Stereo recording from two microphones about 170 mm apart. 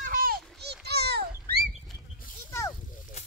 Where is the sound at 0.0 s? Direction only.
55° right (ahead or behind).